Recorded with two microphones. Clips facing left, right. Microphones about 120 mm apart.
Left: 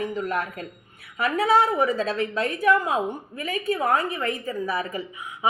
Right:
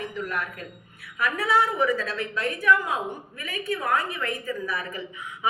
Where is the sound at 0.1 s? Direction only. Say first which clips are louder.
Left 4 dB; 25° left (ahead or behind).